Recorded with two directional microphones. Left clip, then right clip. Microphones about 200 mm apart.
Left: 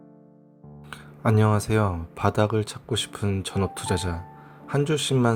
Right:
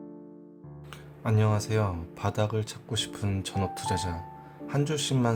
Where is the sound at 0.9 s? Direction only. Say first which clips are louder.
Left 7 dB; 30° left (ahead or behind).